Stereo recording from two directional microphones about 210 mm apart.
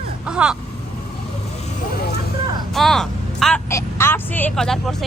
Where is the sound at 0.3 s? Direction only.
5° right (ahead or behind).